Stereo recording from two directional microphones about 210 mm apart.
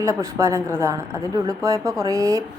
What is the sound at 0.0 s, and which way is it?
A woman's voice, 15° right (ahead or behind).